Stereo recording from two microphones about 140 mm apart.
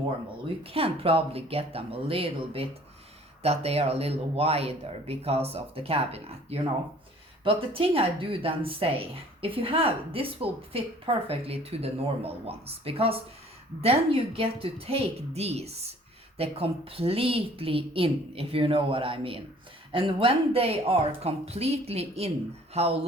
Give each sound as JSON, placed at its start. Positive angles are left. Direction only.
{"t": 0.4, "sound": "speech", "side_deg": -40}